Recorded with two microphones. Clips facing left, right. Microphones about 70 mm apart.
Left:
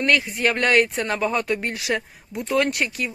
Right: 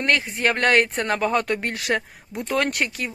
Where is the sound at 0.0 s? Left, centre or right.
Right.